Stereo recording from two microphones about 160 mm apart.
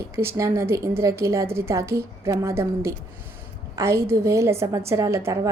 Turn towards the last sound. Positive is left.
turn(degrees=-20)  # may be behind; listen again after turning